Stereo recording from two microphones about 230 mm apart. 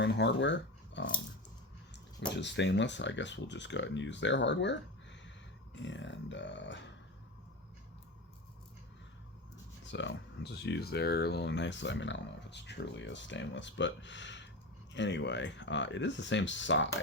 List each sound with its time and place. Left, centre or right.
0.0 s speech: left
2.3 s speech: left
9.9 s speech: left